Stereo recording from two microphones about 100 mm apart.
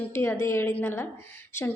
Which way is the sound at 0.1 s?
25° left (ahead or behind).